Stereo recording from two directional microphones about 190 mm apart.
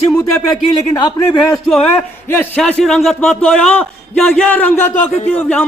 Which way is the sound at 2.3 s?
10° left (ahead or behind).